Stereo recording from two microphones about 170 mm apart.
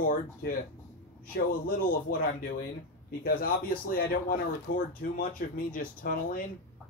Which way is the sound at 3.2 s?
60° left (ahead or behind).